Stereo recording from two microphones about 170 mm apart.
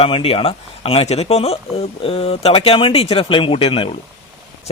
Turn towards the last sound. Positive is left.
turn(degrees=30)  # may be behind; listen again after turning